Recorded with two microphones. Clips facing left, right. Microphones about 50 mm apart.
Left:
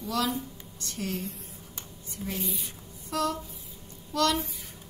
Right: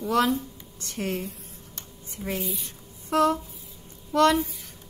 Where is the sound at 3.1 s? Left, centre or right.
Right.